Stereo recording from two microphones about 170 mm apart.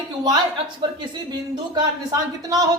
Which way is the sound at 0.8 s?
25° right (ahead or behind).